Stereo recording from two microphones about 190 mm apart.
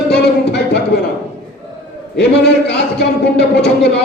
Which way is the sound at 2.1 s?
60° left (ahead or behind).